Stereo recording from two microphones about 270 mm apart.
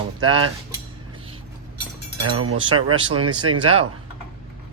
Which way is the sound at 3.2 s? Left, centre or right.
Right.